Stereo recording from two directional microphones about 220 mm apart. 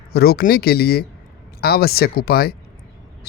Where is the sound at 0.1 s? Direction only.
45° left (ahead or behind).